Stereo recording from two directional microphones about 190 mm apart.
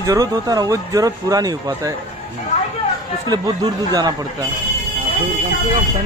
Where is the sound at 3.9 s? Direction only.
20° right (ahead or behind).